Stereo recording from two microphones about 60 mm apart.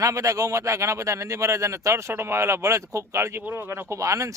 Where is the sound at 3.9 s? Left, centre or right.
Right.